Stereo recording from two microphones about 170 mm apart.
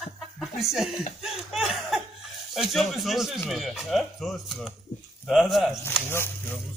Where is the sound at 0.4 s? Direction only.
Centre (ahead or behind).